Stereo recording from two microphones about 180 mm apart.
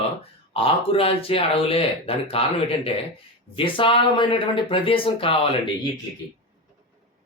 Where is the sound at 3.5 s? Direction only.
30° left (ahead or behind).